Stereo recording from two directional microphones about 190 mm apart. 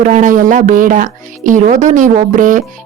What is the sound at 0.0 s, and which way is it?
Speech, 45° right (ahead or behind).